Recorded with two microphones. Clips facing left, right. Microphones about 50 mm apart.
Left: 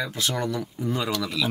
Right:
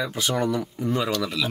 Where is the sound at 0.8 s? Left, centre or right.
Centre.